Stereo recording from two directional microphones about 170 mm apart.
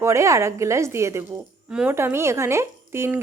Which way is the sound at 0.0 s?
15° right (ahead or behind).